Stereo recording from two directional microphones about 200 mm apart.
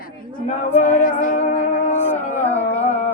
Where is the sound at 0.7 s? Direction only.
10° left (ahead or behind).